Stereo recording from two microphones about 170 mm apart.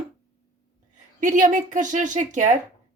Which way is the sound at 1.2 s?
45° right (ahead or behind).